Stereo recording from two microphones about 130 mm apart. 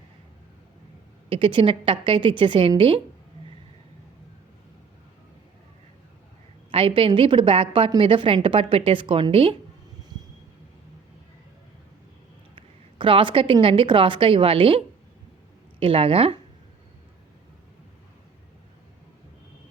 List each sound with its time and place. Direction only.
1.3 s a woman's voice: 40° right (ahead or behind)
6.7 s a woman's voice: 45° right (ahead or behind)
12.5 s a woman's voice: 40° right (ahead or behind)